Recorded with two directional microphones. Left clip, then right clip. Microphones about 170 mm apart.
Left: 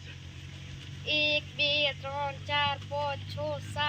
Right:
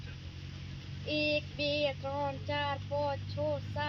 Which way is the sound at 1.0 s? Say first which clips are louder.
Left 4 dB; 25° right (ahead or behind).